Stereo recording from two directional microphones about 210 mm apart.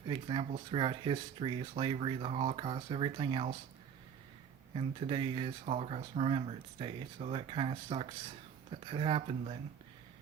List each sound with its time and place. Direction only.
0.1 s speech: 25° right (ahead or behind)
4.7 s speech: 25° right (ahead or behind)